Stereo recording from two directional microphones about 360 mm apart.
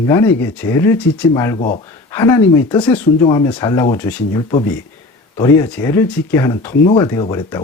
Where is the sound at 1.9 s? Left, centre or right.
Centre.